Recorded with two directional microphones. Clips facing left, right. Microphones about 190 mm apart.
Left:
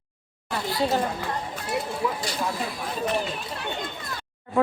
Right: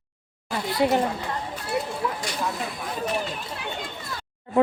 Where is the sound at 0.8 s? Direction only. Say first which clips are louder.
Right 3 dB; 20° right (ahead or behind).